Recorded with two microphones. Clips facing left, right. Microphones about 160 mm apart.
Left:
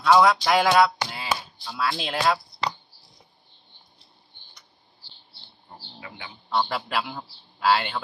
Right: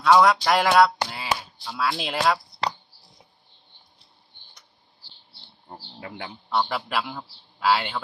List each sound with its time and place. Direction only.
0.0 s speech: 5° left (ahead or behind)
5.9 s speech: 50° right (ahead or behind)
6.7 s a man's voice: centre (ahead or behind)